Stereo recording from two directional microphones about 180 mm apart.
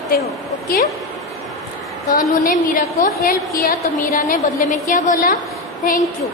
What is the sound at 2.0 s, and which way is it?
Speech, 45° left (ahead or behind).